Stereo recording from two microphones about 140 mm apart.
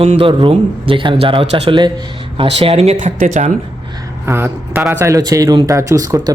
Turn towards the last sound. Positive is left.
turn(degrees=-25)  # may be behind; listen again after turning